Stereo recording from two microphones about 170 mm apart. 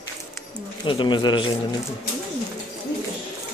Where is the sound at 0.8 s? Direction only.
30° left (ahead or behind).